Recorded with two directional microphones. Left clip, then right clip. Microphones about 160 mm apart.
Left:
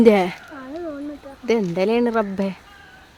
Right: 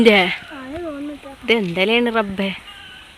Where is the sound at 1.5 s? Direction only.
5° left (ahead or behind).